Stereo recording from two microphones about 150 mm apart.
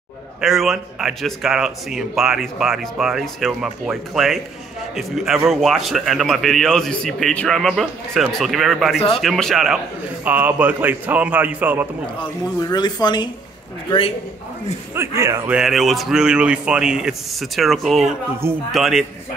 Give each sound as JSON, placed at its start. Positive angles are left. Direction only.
{"t": 0.4, "sound": "speech", "side_deg": 0}
{"t": 10.2, "sound": "a man's voice", "side_deg": -10}
{"t": 12.2, "sound": "a man's voice", "side_deg": 25}
{"t": 15.0, "sound": "a man's voice", "side_deg": -20}
{"t": 15.5, "sound": "speech", "side_deg": 0}